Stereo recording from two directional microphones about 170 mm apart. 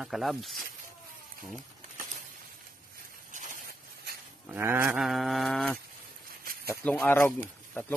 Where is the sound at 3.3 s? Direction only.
55° right (ahead or behind).